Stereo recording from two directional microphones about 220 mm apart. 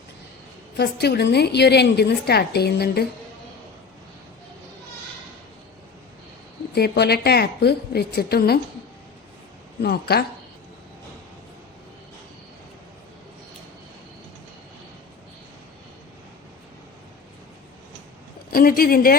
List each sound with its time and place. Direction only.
0.8 s a woman's voice: 50° left (ahead or behind)
6.7 s a woman's voice: 45° left (ahead or behind)
9.8 s a woman's voice: 45° left (ahead or behind)
18.5 s speech: 40° left (ahead or behind)